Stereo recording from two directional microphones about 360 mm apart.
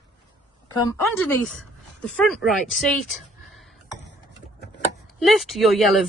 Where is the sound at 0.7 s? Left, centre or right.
Centre.